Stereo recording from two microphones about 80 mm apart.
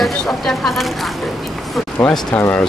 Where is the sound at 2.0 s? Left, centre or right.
Centre.